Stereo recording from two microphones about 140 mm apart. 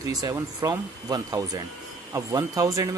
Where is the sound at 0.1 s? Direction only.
25° right (ahead or behind).